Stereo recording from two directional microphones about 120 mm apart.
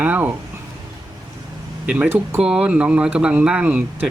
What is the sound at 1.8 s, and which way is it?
Speech, 10° right (ahead or behind).